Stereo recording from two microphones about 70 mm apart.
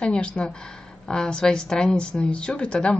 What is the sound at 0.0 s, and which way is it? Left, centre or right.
A woman's voice, centre.